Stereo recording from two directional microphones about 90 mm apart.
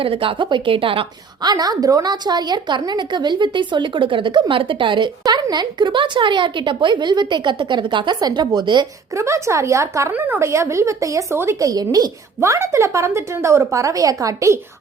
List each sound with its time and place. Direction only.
0.0 s speech: 90° right
1.4 s a woman's voice: 50° right (ahead or behind)
5.2 s a woman's voice: 45° right (ahead or behind)
9.1 s a woman's voice: 35° right (ahead or behind)
10.1 s a woman's voice: 20° right (ahead or behind); by 12.1 s 45° right (ahead or behind)
12.4 s a woman's voice: 35° right (ahead or behind)